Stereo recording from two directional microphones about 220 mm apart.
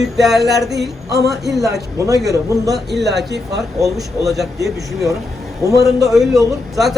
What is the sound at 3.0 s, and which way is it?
Speech, 50° right (ahead or behind).